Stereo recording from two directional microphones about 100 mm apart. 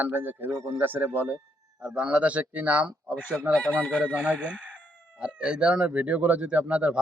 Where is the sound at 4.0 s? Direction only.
10° right (ahead or behind).